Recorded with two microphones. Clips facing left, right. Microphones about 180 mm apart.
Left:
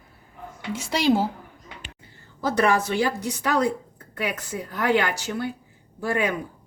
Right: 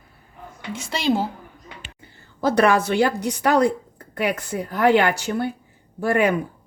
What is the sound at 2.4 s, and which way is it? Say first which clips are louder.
A woman's voice: right 4 dB; 70° right (ahead or behind).